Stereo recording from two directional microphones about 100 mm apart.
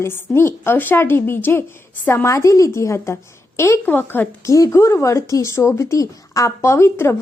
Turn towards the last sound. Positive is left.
turn(degrees=25)  # may be behind; listen again after turning